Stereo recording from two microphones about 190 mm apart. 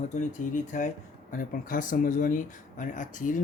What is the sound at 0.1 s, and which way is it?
Speech, 40° left (ahead or behind).